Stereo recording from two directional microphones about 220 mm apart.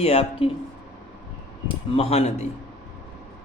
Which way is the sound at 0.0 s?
25° left (ahead or behind).